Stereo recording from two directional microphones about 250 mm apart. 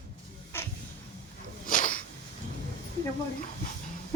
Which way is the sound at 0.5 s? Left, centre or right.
Centre.